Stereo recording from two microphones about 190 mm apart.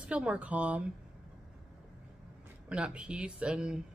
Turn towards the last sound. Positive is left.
turn(degrees=-5)  # may be behind; listen again after turning